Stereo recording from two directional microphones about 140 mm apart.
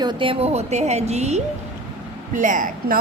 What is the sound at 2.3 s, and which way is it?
Speech, 65° right (ahead or behind).